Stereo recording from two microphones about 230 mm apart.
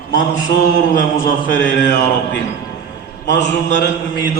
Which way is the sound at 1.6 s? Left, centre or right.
Left.